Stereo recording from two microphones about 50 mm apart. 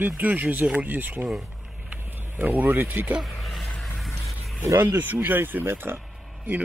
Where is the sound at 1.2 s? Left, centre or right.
Centre.